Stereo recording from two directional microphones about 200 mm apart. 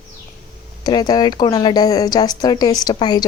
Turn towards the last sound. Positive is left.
turn(degrees=20)  # may be behind; listen again after turning